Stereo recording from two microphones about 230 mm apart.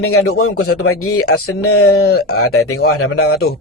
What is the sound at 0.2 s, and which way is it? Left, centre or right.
Speech, left.